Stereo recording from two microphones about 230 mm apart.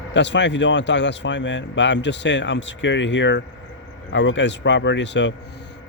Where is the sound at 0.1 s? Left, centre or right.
Left.